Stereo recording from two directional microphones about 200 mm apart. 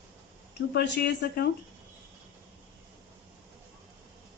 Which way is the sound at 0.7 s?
55° left (ahead or behind).